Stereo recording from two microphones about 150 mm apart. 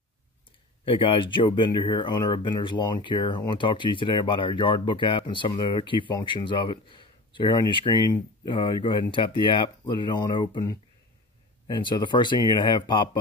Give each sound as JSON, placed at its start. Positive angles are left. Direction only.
{"t": 0.8, "sound": "speech", "side_deg": 35}